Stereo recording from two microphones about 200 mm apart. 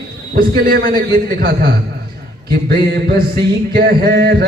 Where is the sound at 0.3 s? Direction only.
45° right (ahead or behind).